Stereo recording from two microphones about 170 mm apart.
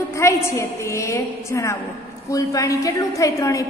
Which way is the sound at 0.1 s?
15° left (ahead or behind).